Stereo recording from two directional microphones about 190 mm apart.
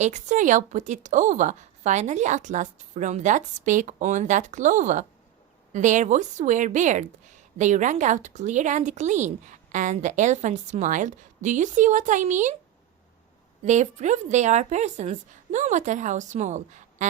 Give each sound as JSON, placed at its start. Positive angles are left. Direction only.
{"t": 0.0, "sound": "a woman's voice", "side_deg": -40}
{"t": 13.7, "sound": "a woman's voice", "side_deg": -40}